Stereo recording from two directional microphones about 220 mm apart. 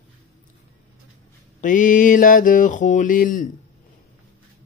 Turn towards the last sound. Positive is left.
turn(degrees=35)  # may be behind; listen again after turning